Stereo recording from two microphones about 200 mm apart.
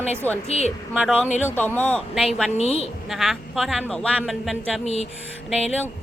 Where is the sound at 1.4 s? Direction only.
10° left (ahead or behind).